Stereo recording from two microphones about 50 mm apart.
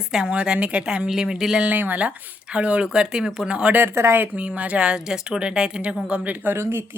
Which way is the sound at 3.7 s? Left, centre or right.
Right.